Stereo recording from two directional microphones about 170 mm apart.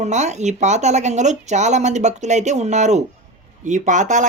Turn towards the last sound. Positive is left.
turn(degrees=-45)  # may be behind; listen again after turning